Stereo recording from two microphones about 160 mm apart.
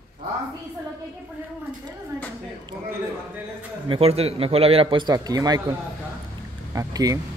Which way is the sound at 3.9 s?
40° right (ahead or behind).